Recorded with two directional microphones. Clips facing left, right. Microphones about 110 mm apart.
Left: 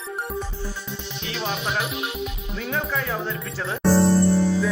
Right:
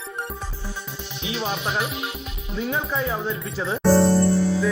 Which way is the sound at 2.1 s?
Centre (ahead or behind).